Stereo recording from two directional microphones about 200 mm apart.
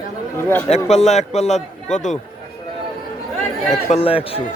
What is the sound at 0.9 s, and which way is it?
A man's voice, 35° left (ahead or behind).